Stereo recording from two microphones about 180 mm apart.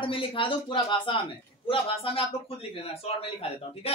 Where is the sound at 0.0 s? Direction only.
30° left (ahead or behind).